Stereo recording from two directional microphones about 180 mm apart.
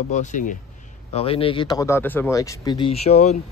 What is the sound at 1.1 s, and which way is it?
Speech, 30° left (ahead or behind).